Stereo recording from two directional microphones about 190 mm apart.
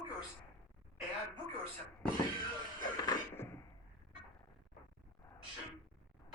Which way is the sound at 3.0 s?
20° left (ahead or behind).